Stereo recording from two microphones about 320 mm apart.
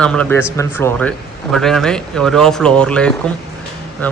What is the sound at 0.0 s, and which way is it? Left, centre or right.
Speech, centre.